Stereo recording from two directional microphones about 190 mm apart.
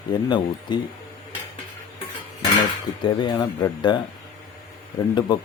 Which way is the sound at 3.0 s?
20° left (ahead or behind).